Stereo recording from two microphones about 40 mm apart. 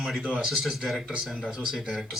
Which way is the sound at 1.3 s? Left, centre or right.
Right.